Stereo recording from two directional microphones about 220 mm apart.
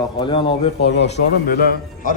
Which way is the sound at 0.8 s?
50° left (ahead or behind).